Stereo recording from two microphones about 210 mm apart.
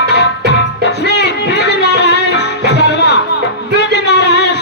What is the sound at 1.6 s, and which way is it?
Music, 55° left (ahead or behind).